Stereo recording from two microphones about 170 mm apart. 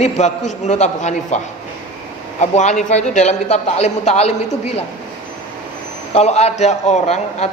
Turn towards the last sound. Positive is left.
turn(degrees=40)  # may be behind; listen again after turning